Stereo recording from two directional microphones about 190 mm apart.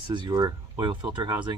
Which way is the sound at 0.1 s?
25° right (ahead or behind).